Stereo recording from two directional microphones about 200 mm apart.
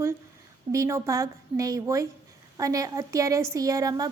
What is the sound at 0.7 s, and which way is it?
A woman's voice, 15° right (ahead or behind).